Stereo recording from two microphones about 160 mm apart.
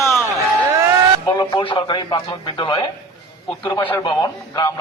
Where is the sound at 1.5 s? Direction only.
30° left (ahead or behind).